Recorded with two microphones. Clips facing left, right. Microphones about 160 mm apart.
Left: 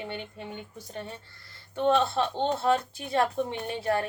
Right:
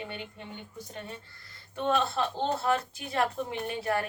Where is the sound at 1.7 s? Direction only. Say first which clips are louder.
Left 4 dB; 30° left (ahead or behind).